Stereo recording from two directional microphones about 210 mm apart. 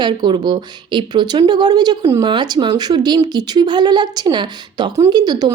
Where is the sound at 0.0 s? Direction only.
20° right (ahead or behind).